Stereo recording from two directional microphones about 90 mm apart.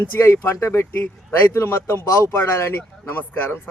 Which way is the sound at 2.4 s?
30° left (ahead or behind).